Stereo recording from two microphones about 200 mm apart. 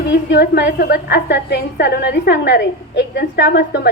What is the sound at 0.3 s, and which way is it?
A woman's voice, 55° left (ahead or behind).